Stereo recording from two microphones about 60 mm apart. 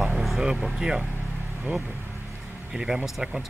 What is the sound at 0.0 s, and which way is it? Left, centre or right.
Speech, centre.